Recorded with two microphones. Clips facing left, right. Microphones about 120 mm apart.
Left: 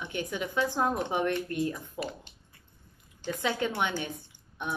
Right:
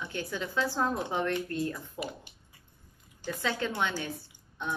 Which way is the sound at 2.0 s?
10° right (ahead or behind).